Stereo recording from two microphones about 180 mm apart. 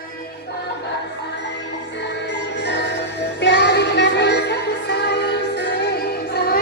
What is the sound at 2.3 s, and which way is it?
Music, 70° left (ahead or behind).